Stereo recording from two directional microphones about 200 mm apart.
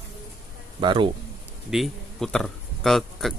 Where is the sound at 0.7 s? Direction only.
25° right (ahead or behind).